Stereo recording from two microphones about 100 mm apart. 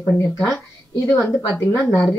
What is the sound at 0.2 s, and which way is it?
A woman's voice, 30° left (ahead or behind).